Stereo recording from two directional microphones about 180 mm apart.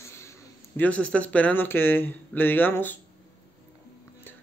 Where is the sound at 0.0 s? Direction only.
15° left (ahead or behind).